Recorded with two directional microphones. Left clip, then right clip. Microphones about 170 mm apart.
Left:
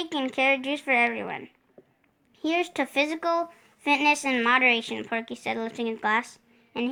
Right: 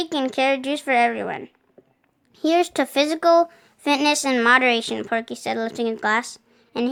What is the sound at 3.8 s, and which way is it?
A woman's voice, 50° right (ahead or behind).